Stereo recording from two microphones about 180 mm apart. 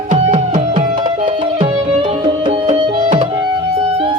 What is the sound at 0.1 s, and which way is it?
Music, 40° right (ahead or behind).